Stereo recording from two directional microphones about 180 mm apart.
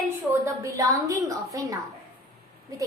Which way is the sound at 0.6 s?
20° right (ahead or behind).